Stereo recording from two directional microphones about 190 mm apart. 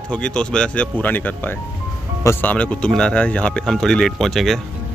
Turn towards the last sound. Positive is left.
turn(degrees=0)  # may be behind; listen again after turning